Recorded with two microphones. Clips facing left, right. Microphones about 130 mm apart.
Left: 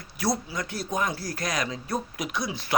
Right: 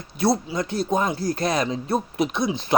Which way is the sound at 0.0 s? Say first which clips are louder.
Right 6 dB; 25° right (ahead or behind).